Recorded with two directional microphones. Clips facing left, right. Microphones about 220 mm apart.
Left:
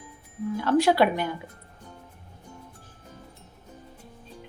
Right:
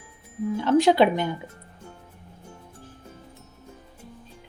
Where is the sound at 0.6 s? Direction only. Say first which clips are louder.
Right 2 dB; 20° right (ahead or behind).